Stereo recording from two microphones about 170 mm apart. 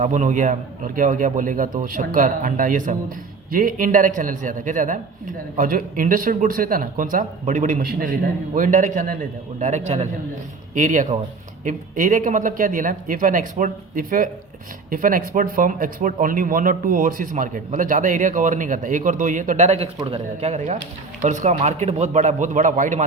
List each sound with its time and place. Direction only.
0.0 s a man's voice: 45° right (ahead or behind)
20.0 s a man's voice: 25° right (ahead or behind)
20.4 s a man's voice: 40° right (ahead or behind)